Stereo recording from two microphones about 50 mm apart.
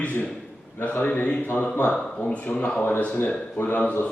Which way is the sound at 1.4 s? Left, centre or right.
Left.